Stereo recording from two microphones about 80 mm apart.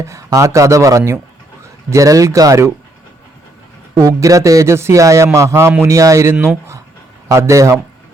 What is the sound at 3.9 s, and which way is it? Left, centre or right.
A man's voice, right.